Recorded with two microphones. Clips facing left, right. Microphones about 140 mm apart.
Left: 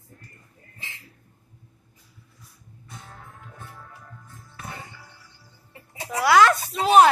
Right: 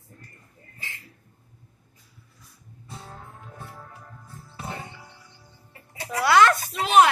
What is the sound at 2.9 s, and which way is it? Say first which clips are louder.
Music: right 3 dB; 30° right (ahead or behind).